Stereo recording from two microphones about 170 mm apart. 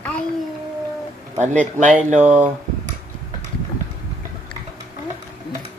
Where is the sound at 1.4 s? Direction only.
45° right (ahead or behind).